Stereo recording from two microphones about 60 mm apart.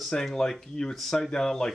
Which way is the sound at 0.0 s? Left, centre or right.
Centre.